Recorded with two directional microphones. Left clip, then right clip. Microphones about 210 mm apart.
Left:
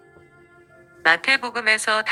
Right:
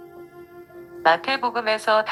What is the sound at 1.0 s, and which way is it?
A woman's voice, 15° left (ahead or behind).